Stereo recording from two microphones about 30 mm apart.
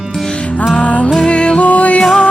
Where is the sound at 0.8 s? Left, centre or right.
Left.